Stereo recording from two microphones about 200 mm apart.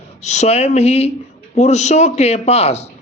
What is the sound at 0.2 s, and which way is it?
Speech, 35° left (ahead or behind).